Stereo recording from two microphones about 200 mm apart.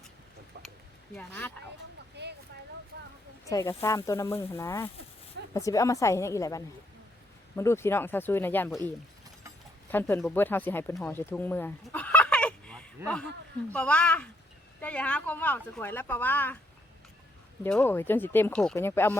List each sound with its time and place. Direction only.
0.5 s a sound: 55° right (ahead or behind)
1.1 s speech: 10° left (ahead or behind)
2.2 s a sound: 55° right (ahead or behind)
3.5 s speech: 15° left (ahead or behind)
9.9 s speech: 10° left (ahead or behind)
17.6 s speech: 5° left (ahead or behind)